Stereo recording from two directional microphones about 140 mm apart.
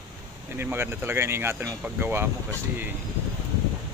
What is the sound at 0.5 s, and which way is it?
Speech, 15° right (ahead or behind).